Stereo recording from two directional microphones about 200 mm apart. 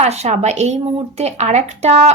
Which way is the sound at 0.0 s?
35° right (ahead or behind).